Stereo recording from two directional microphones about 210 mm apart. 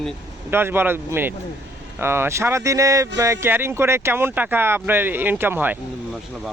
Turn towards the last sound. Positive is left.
turn(degrees=-10)  # may be behind; listen again after turning